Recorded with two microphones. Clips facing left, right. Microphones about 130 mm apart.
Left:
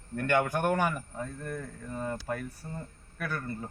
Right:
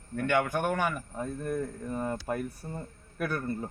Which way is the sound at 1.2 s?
15° right (ahead or behind).